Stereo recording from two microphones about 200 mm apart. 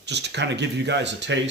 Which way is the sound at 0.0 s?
60° right (ahead or behind).